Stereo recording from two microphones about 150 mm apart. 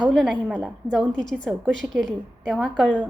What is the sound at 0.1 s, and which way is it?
A woman's voice, centre (ahead or behind).